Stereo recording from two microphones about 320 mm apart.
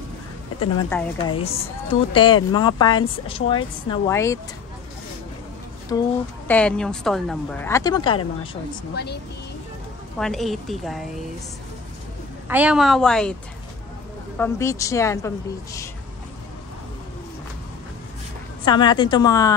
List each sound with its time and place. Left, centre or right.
1.1 s speech: centre
5.9 s a woman's voice: centre
8.9 s speech: left
10.1 s a woman's voice: centre
12.4 s a woman's voice: centre
14.4 s speech: centre
18.6 s speech: centre